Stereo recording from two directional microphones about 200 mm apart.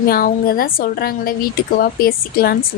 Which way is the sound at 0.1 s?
45° left (ahead or behind).